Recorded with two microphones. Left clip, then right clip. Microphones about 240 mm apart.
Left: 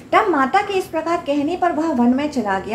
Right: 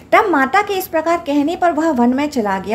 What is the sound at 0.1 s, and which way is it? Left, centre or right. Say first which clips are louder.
A woman's voice: right 3 dB; right.